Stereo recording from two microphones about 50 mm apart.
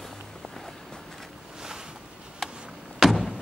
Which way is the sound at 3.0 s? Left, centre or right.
Centre.